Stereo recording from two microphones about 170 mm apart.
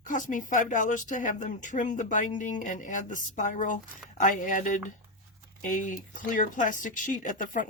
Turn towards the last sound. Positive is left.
turn(degrees=50)  # may be behind; listen again after turning